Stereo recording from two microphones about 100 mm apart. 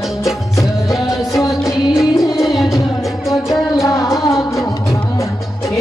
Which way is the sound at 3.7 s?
30° left (ahead or behind).